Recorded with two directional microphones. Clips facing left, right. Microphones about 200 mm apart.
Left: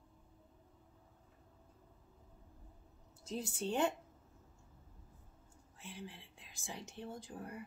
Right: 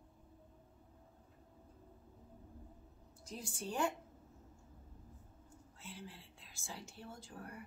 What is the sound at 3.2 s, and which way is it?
Speech, 25° left (ahead or behind).